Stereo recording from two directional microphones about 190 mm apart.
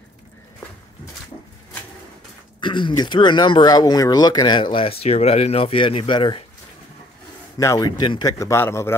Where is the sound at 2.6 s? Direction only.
25° left (ahead or behind).